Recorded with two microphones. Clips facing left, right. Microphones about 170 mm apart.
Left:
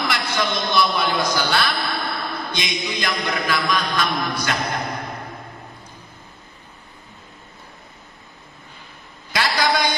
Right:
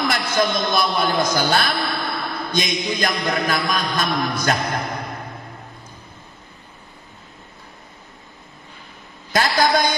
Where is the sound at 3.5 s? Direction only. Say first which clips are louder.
Even; 45° right (ahead or behind).